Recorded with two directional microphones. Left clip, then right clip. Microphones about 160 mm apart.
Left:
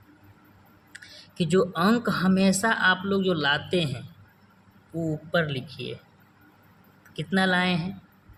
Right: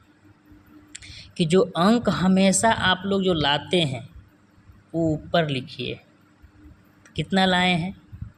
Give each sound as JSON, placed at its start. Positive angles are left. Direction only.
{"t": 0.9, "sound": "speech", "side_deg": -30}
{"t": 4.9, "sound": "speech", "side_deg": -25}
{"t": 7.1, "sound": "speech", "side_deg": -30}